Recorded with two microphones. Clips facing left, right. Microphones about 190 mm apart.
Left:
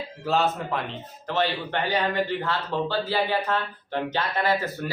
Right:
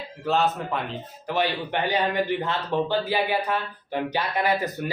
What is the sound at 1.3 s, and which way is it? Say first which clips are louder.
A man's voice: even; 15° right (ahead or behind).